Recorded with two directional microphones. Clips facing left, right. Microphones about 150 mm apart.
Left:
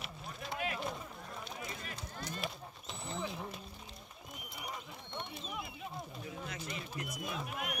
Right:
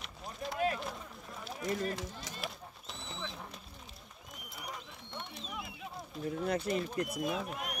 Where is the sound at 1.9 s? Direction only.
90° right.